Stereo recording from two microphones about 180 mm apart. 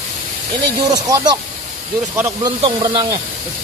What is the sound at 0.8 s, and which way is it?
Speech, 20° right (ahead or behind).